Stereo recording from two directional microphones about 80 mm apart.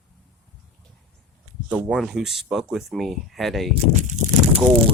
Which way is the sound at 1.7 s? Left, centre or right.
Centre.